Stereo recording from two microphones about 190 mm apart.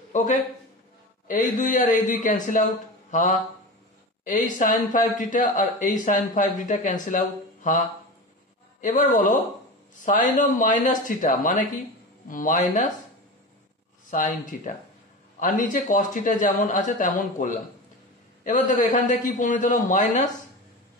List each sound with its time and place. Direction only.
0.1 s a man's voice: 40° left (ahead or behind)
8.8 s speech: 45° left (ahead or behind)
14.1 s speech: 40° left (ahead or behind)